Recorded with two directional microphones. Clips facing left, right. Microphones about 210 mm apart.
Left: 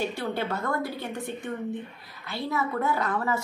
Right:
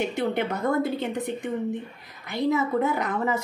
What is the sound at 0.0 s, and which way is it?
A woman's voice, 20° right (ahead or behind).